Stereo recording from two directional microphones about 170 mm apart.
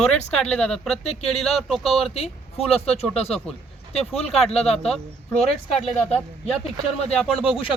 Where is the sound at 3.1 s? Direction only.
35° left (ahead or behind).